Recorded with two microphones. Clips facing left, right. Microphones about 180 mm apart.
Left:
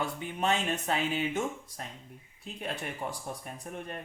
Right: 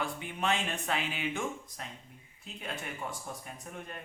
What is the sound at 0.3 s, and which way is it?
Speech, 40° left (ahead or behind).